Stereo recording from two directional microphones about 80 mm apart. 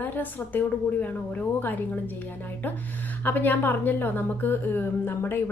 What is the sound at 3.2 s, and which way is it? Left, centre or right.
A woman's voice, left.